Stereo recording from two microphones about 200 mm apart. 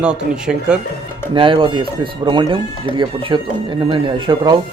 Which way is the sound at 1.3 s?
25° right (ahead or behind).